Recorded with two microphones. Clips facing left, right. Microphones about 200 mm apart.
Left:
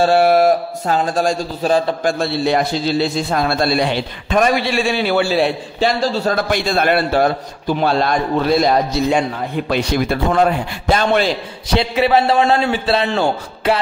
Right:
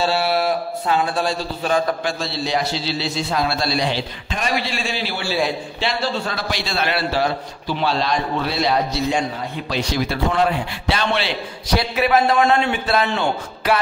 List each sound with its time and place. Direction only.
0.0 s a man's voice: 50° left (ahead or behind)
2.0 s a man's voice: 55° left (ahead or behind)
5.8 s a man's voice: 40° left (ahead or behind)
9.7 s a man's voice: 55° left (ahead or behind)
11.7 s a man's voice: 25° left (ahead or behind)